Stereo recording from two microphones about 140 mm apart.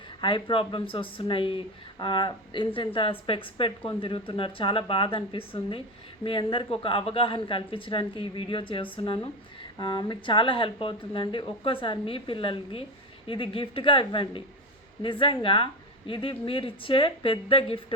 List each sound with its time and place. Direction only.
0.2 s speech: 35° left (ahead or behind)